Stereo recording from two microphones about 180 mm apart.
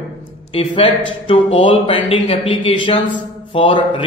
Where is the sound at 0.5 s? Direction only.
30° left (ahead or behind).